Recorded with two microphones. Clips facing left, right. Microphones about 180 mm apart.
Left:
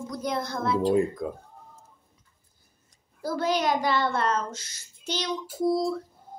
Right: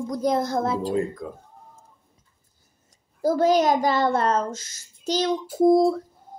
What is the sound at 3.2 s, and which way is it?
A child's voice, 40° right (ahead or behind).